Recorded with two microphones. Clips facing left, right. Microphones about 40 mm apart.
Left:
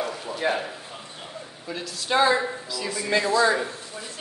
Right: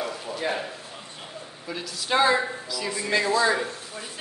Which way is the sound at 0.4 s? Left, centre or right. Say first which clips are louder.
Left 3 dB; centre.